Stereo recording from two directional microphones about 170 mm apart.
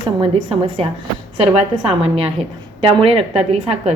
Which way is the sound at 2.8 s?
30° right (ahead or behind).